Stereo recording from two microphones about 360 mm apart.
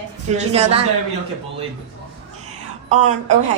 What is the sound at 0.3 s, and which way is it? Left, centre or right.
Speech, centre.